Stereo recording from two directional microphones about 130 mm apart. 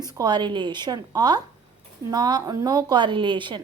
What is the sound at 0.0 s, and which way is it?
A woman's voice, 30° right (ahead or behind).